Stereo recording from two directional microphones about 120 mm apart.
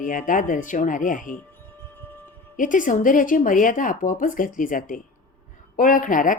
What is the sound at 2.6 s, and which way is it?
A woman's voice, 90° left.